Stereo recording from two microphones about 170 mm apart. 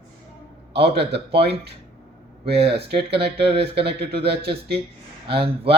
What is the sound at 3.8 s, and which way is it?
Speech, 75° right (ahead or behind).